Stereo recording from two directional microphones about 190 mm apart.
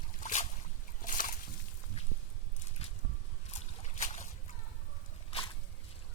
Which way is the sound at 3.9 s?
40° left (ahead or behind).